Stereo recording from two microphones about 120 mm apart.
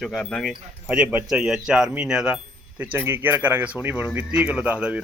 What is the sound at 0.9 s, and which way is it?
Speech, 15° right (ahead or behind).